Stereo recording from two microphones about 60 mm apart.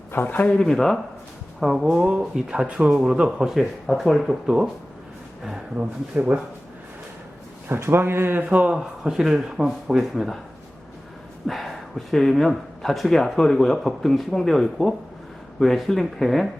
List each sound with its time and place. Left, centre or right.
0.1 s speech: left
0.3 s speech: centre
0.7 s speech: centre
2.0 s speech: centre
4.4 s speech: centre
5.7 s speech: right
7.7 s speech: right
8.7 s speech: centre
11.4 s speech: centre